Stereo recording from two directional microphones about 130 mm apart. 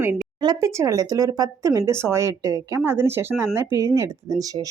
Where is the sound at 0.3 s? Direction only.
30° right (ahead or behind).